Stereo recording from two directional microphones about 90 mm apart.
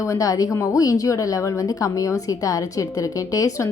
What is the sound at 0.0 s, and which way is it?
A woman's voice, 35° left (ahead or behind).